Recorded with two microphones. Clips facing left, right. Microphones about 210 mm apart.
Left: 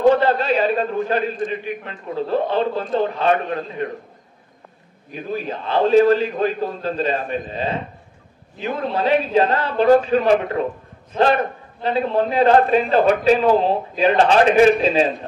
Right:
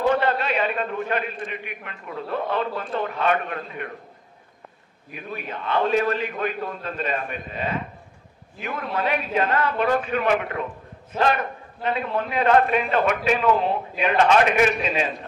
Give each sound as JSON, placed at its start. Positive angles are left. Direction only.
{"t": 0.0, "sound": "a sound", "side_deg": 30}
{"t": 1.4, "sound": "a man's voice", "side_deg": 30}
{"t": 5.1, "sound": "a man's voice", "side_deg": 30}